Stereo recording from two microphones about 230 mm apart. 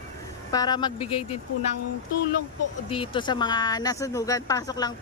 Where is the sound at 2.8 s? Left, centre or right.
Left.